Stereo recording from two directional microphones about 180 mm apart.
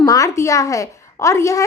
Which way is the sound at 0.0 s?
20° left (ahead or behind).